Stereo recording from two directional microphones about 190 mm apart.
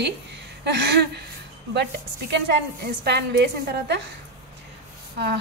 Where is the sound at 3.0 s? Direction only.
60° right (ahead or behind).